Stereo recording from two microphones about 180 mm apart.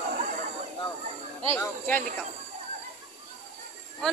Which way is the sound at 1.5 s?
10° left (ahead or behind).